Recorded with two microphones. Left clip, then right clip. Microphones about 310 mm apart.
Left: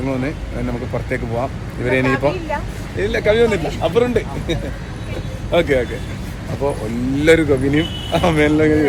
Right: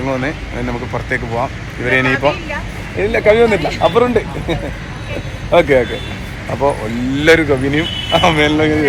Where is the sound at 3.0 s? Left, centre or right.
Centre.